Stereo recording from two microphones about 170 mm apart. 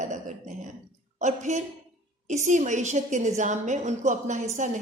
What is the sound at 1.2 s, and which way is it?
A woman's voice, 45° right (ahead or behind).